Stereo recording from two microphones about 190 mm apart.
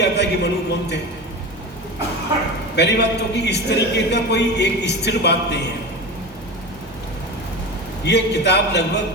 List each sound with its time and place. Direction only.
0.0 s a man's voice: 60° left (ahead or behind)
2.7 s a man's voice: 65° left (ahead or behind)
8.0 s a man's voice: 60° left (ahead or behind)